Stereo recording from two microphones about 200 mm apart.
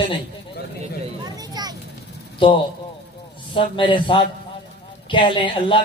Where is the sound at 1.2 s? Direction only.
20° right (ahead or behind).